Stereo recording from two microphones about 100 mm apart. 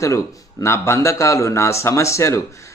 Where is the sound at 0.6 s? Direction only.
30° left (ahead or behind).